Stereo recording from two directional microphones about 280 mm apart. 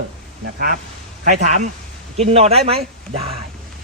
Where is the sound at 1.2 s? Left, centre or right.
Right.